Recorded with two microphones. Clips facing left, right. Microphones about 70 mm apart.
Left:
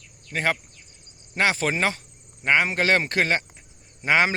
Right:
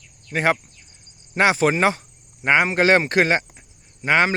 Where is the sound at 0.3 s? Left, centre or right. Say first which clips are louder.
Right 5 dB; right.